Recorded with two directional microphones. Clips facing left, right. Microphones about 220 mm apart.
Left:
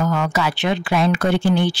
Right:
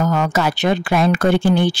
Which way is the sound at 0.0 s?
40° right (ahead or behind).